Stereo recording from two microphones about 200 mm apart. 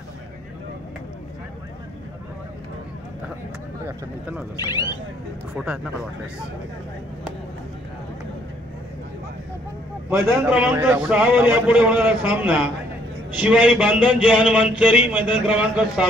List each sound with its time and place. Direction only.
3.8 s speech: 10° right (ahead or behind)
4.6 s speech: 20° left (ahead or behind)
10.4 s a man's voice: 5° right (ahead or behind)